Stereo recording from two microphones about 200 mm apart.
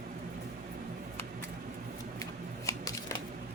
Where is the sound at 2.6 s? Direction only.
15° left (ahead or behind).